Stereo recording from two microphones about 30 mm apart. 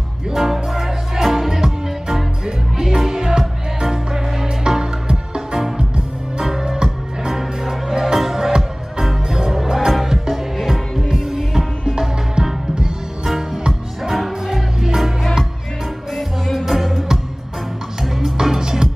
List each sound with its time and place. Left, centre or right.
0.3 s music: centre; by 5.9 s right
6.8 s music: centre
12.4 s music: right
13.4 s music: centre
16.5 s music: centre
18.0 s music: centre